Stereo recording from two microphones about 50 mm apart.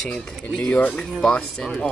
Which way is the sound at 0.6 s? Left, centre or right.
Left.